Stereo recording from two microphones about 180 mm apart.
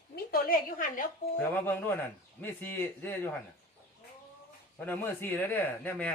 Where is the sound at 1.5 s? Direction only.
10° left (ahead or behind).